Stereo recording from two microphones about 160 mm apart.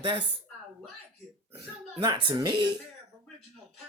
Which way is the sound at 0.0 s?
30° right (ahead or behind).